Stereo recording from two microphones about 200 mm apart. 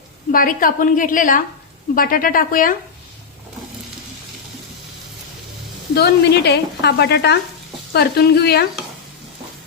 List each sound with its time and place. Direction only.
0.3 s a woman's voice: 45° left (ahead or behind)
5.9 s speech: 55° left (ahead or behind)